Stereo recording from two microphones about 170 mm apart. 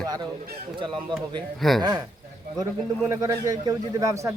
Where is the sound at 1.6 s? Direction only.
Centre (ahead or behind).